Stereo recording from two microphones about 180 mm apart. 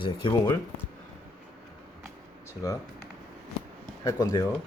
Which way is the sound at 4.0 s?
20° left (ahead or behind).